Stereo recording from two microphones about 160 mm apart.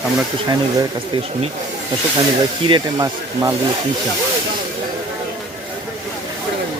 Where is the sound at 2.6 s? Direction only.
30° right (ahead or behind).